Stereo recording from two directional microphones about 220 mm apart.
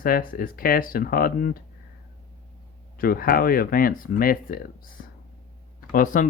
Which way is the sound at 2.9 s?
40° left (ahead or behind).